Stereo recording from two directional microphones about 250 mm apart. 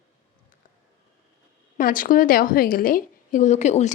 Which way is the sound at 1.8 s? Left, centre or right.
Left.